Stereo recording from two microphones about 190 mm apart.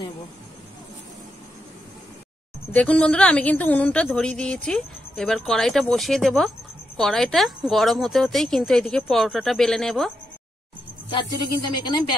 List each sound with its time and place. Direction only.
2.7 s a woman's voice: 5° left (ahead or behind)
11.1 s speech: 20° left (ahead or behind)